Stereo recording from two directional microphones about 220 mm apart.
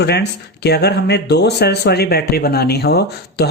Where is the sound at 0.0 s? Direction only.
50° left (ahead or behind).